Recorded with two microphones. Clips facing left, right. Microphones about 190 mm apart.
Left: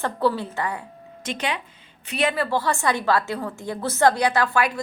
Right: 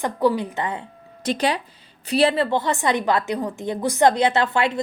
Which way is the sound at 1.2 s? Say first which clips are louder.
Right 6 dB; 35° right (ahead or behind).